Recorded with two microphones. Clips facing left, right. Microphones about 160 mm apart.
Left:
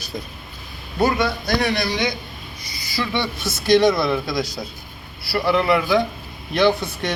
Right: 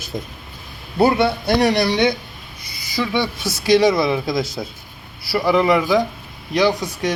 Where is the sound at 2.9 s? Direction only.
15° right (ahead or behind).